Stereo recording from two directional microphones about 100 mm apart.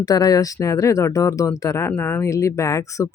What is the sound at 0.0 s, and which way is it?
Speech, 40° left (ahead or behind).